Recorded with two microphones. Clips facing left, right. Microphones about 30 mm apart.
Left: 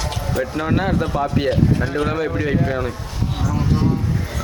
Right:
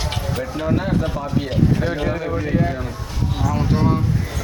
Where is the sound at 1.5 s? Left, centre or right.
Centre.